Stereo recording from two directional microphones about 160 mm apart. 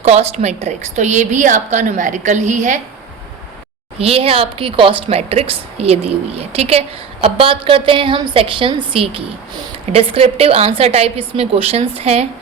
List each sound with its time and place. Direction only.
0.0 s a woman's voice: 45° right (ahead or behind)
3.9 s a woman's voice: 40° right (ahead or behind)